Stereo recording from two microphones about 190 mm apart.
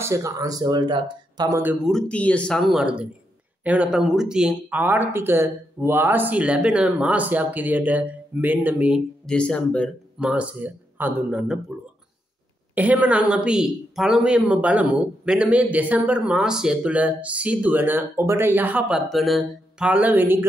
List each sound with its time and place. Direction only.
0.0 s speech: 15° right (ahead or behind)
1.9 s speech: 5° left (ahead or behind)
10.2 s speech: 5° right (ahead or behind)
12.7 s speech: 10° right (ahead or behind)